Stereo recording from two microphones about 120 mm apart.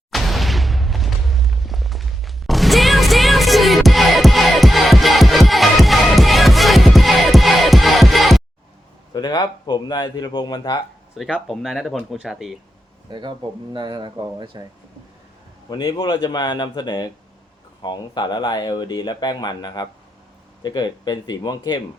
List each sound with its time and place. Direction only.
0.1 s explosion: centre (ahead or behind)
9.1 s speech: 35° left (ahead or behind)
11.2 s speech: 5° right (ahead or behind)
13.1 s speech: 40° right (ahead or behind)
15.7 s speech: 35° left (ahead or behind)